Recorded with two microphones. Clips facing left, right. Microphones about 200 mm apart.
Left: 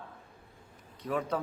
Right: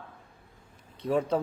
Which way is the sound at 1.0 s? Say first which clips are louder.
Right 6 dB; 25° right (ahead or behind).